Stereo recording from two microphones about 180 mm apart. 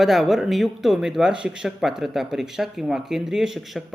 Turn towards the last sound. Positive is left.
turn(degrees=0)  # may be behind; listen again after turning